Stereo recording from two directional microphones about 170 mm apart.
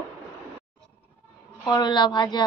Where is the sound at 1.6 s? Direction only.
25° left (ahead or behind).